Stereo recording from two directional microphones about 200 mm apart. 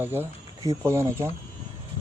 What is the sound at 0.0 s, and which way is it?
Speech, 10° right (ahead or behind).